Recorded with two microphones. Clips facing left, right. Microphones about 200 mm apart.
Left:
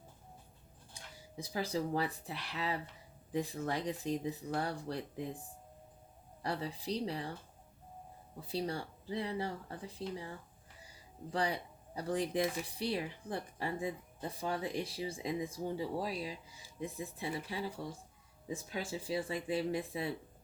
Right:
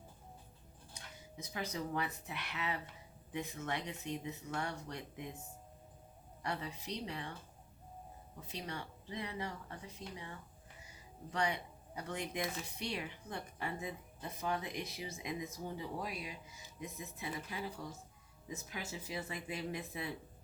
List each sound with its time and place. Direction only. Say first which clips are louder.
1.1 s a woman's voice: left 6 dB; 30° left (ahead or behind)
8.4 s a woman's voice: left 7 dB; 35° left (ahead or behind)
10.8 s a sound: left 4 dB; 35° left (ahead or behind)
12.6 s a woman's voice: left 5 dB; 30° left (ahead or behind)